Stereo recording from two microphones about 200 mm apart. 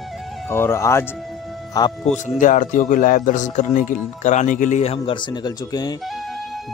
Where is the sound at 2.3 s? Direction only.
40° left (ahead or behind).